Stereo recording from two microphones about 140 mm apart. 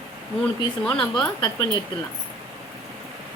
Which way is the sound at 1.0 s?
30° left (ahead or behind).